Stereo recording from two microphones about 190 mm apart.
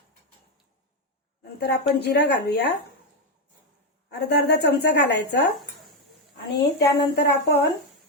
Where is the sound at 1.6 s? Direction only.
60° left (ahead or behind).